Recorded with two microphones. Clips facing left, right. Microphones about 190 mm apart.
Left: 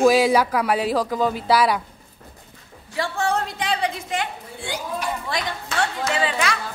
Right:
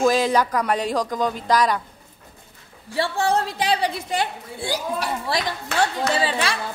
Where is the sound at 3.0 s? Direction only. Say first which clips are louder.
Right 2 dB; 35° right (ahead or behind).